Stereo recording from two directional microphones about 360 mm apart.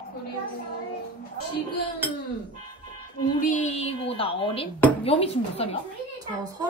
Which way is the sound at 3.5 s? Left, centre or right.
Centre.